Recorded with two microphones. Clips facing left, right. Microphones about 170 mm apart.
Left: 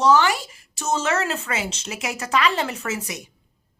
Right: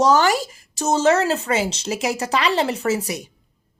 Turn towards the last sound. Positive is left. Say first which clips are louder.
# right 7 dB
turn(degrees=-35)  # may be behind; listen again after turning